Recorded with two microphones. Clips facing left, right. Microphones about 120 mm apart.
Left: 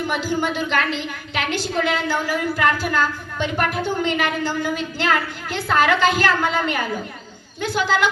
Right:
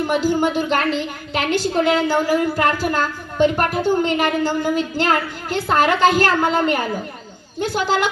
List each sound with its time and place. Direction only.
0.1 s a woman's voice: 40° right (ahead or behind)